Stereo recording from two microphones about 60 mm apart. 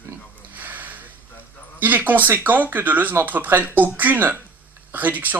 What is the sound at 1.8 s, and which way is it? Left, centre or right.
Speech, right.